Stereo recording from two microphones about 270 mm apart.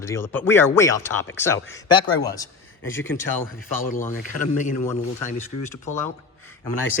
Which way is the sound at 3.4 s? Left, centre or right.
Left.